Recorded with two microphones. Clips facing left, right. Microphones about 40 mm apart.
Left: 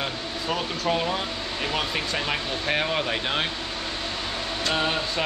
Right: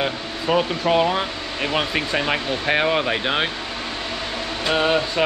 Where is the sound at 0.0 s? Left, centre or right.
Right.